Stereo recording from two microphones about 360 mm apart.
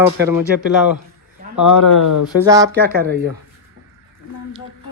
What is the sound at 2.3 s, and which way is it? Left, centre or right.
Speech, centre.